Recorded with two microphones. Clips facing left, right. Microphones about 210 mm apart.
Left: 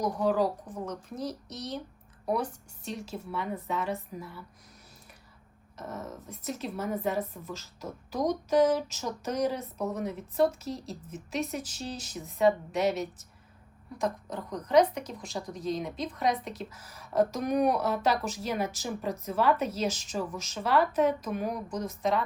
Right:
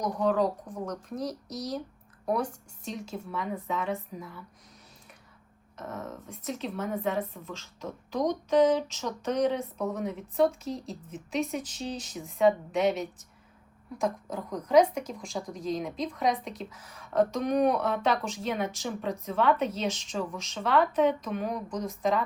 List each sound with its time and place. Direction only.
0.0 s a woman's voice: 5° left (ahead or behind)
5.7 s a woman's voice: centre (ahead or behind)